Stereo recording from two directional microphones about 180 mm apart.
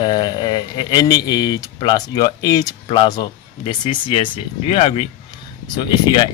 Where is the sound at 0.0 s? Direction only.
25° left (ahead or behind).